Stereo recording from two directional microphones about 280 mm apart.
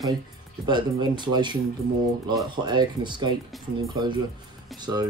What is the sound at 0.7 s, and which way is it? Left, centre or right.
Speech, centre.